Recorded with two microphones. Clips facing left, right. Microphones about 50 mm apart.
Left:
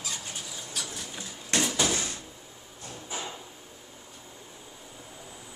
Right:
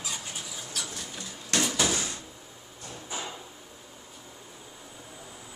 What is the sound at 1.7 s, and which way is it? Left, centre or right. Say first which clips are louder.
Drawer open or close: even; centre.